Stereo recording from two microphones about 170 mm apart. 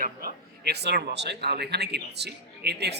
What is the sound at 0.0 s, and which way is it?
A man's voice, 60° right (ahead or behind).